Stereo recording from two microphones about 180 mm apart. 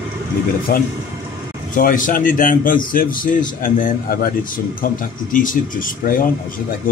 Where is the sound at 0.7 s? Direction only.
60° left (ahead or behind).